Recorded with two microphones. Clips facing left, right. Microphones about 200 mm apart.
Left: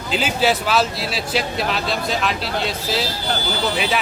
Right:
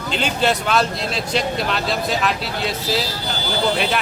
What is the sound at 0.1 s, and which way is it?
A man's voice, 5° left (ahead or behind).